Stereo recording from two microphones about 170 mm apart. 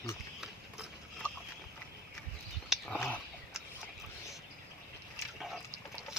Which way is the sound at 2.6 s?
Centre (ahead or behind).